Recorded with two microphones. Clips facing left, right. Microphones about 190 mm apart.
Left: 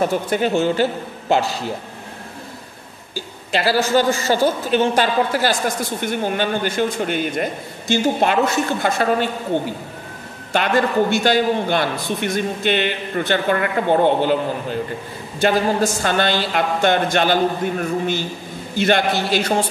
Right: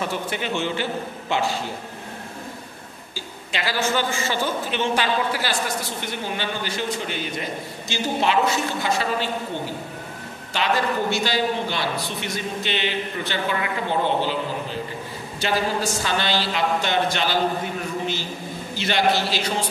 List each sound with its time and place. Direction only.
0.0 s a man's voice: 45° left (ahead or behind)
3.5 s a man's voice: 40° left (ahead or behind)
10.5 s a man's voice: 55° left (ahead or behind)